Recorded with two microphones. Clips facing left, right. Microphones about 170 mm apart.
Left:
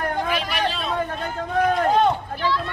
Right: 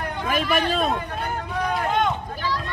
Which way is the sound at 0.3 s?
45° right (ahead or behind).